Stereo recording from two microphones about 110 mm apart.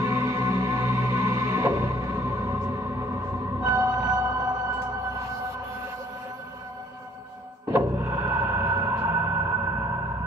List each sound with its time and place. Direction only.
0.0 s music: 25° right (ahead or behind)
7.7 s music: 25° right (ahead or behind)